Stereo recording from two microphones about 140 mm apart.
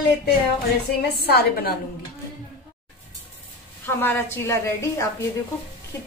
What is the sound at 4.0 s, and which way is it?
A woman's voice, 15° left (ahead or behind).